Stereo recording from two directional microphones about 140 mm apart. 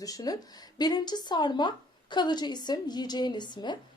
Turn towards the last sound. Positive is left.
turn(degrees=30)  # may be behind; listen again after turning